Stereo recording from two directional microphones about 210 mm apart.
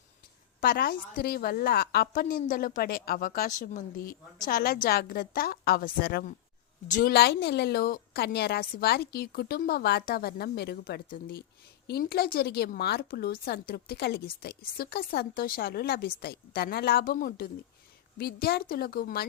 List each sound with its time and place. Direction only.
0.6 s a woman's voice: 45° left (ahead or behind)